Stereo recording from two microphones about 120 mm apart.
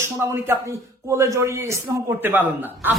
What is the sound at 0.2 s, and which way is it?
A man's voice, 20° right (ahead or behind).